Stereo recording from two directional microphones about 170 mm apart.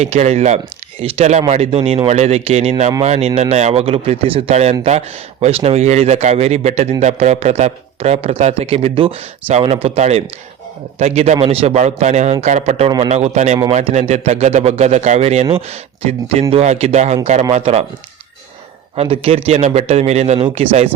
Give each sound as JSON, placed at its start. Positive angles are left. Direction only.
{"t": 0.0, "sound": "speech", "side_deg": -40}
{"t": 18.9, "sound": "speech", "side_deg": -35}